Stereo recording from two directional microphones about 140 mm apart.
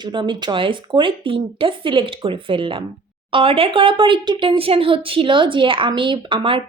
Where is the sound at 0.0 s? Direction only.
35° right (ahead or behind).